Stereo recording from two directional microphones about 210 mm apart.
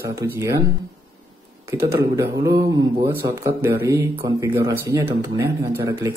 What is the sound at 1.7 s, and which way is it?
Speech, 15° right (ahead or behind).